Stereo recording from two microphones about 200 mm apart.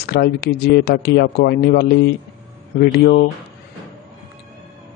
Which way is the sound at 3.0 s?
50° left (ahead or behind).